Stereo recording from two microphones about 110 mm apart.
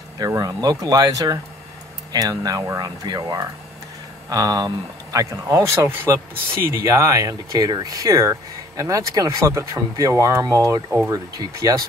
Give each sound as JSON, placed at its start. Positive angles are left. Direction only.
{"t": 0.2, "sound": "speech", "side_deg": -30}